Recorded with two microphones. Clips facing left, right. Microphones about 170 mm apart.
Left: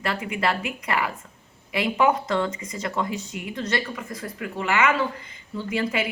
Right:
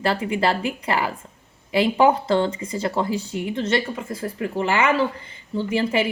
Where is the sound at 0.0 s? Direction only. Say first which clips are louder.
Right 5 dB; 30° right (ahead or behind).